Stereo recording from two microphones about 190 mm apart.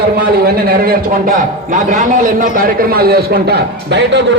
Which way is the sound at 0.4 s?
55° right (ahead or behind).